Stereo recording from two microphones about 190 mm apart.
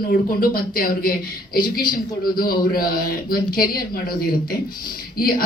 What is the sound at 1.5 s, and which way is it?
Speech, 25° left (ahead or behind).